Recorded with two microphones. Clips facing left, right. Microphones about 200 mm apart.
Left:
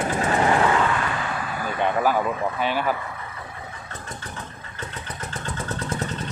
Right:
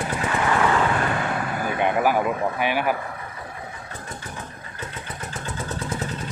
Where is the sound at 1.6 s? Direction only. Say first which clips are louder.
Right 1 dB; 15° right (ahead or behind).